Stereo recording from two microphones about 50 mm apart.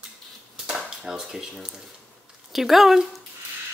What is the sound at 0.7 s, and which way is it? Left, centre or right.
Speech, centre.